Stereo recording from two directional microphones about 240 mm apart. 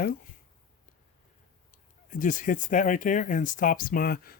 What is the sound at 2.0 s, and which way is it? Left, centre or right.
Speech, left.